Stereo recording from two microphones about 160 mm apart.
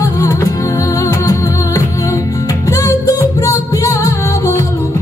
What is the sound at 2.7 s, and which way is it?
Music, 20° left (ahead or behind).